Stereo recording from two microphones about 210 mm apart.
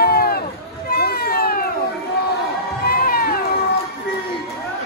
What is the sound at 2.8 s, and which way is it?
Music, 45° left (ahead or behind).